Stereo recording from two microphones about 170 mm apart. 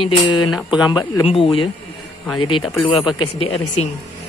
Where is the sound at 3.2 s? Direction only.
35° left (ahead or behind).